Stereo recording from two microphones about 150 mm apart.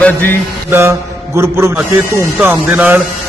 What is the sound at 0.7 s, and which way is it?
Speech, 15° right (ahead or behind).